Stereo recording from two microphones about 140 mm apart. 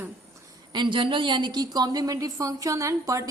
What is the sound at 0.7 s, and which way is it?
A woman's voice, 35° right (ahead or behind).